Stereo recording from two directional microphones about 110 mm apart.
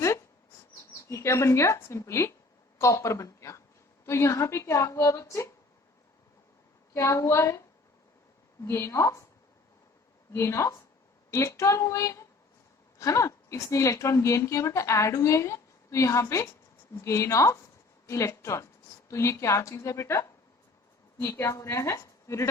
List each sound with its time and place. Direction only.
1.1 s a woman's voice: 25° left (ahead or behind)
6.9 s a woman's voice: 25° left (ahead or behind)
8.6 s a woman's voice: 25° left (ahead or behind)
10.3 s a woman's voice: 25° left (ahead or behind)